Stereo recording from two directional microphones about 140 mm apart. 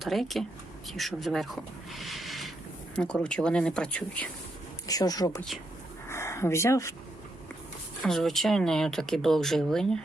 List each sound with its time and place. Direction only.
0.0 s speech: centre (ahead or behind)
1.9 s a sound: centre (ahead or behind)
2.9 s speech: 5° left (ahead or behind)
4.9 s speech: 25° left (ahead or behind)
8.0 s speech: centre (ahead or behind)